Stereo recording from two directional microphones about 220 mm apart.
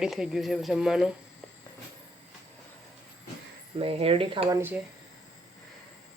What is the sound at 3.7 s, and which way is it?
Speech, 25° right (ahead or behind).